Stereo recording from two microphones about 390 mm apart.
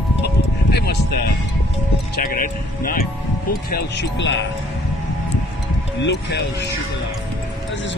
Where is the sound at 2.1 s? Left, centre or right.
Left.